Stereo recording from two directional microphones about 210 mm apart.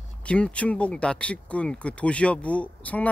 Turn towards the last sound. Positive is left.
turn(degrees=5)  # may be behind; listen again after turning